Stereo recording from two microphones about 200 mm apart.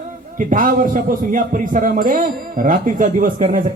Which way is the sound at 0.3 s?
40° right (ahead or behind).